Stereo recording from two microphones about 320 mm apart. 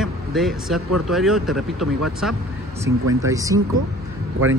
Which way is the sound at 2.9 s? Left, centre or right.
Right.